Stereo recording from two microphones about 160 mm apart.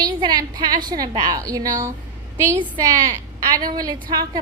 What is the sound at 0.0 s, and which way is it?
A woman's voice, 25° right (ahead or behind).